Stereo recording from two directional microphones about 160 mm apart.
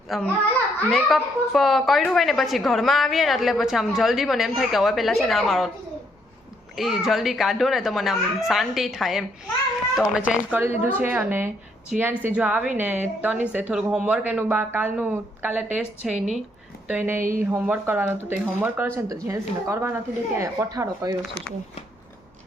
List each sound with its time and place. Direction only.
0.1 s speech: centre (ahead or behind)
6.7 s speech: centre (ahead or behind); by 21.2 s 20° right (ahead or behind)